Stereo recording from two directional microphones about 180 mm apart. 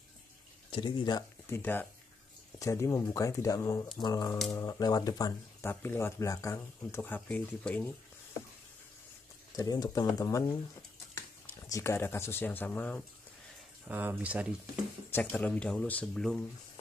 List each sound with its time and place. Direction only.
0.7 s speech: 30° left (ahead or behind)
1.6 s speech: 10° left (ahead or behind)
9.6 s speech: 20° left (ahead or behind)
13.8 s speech: 10° right (ahead or behind)
15.0 s speech: 10° left (ahead or behind)